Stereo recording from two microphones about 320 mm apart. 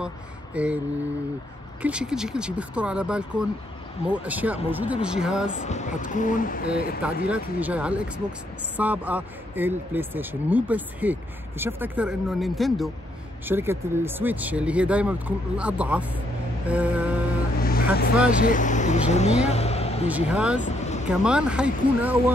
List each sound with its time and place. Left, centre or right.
0.6 s speech: centre
1.8 s speech: centre
5.7 s speech: left
7.2 s speech: centre
17.6 s vehicle: left
20.1 s speech: centre
20.6 s vehicle: left
21.1 s speech: centre